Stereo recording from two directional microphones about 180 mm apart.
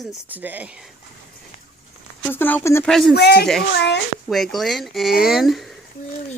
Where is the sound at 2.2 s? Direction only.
10° left (ahead or behind).